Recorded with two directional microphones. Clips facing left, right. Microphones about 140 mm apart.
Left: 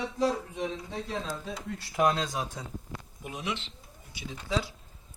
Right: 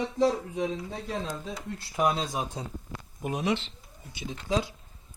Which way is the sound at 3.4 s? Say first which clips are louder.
Right 6 dB; 35° right (ahead or behind).